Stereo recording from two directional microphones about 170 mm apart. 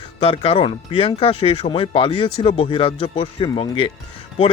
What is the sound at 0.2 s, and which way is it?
Speech, 35° left (ahead or behind).